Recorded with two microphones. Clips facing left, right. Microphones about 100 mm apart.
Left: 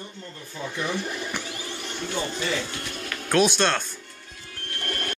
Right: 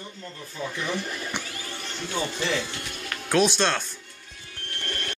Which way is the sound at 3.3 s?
Centre (ahead or behind).